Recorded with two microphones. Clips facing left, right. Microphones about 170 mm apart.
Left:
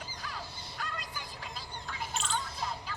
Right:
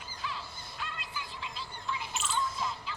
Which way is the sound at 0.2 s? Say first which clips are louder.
Right 5 dB; 45° left (ahead or behind).